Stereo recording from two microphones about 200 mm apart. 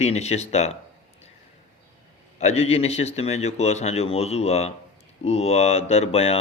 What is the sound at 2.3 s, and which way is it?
Speech, 35° left (ahead or behind).